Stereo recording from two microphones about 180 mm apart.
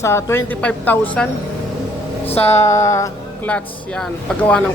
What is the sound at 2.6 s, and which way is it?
Speech, 15° left (ahead or behind).